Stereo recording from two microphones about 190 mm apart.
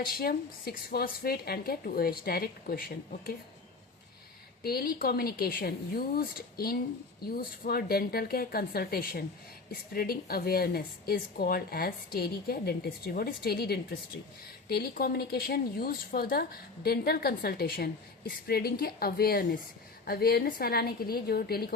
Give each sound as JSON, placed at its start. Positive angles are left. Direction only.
{"t": 0.0, "sound": "speech", "side_deg": 50}
{"t": 4.6, "sound": "speech", "side_deg": 55}